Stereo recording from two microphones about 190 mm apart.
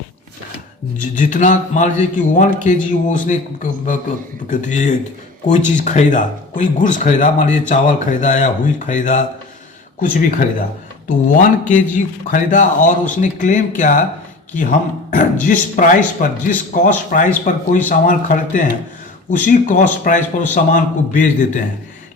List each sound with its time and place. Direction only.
0.9 s a man's voice: 40° left (ahead or behind)